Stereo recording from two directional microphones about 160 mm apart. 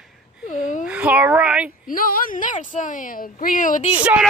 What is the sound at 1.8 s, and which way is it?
A woman's voice, 65° left (ahead or behind).